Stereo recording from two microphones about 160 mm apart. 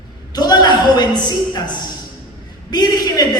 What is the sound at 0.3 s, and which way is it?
A woman's voice, 25° left (ahead or behind).